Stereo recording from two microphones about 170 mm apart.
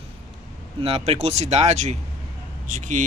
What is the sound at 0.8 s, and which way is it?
Speech, 35° right (ahead or behind).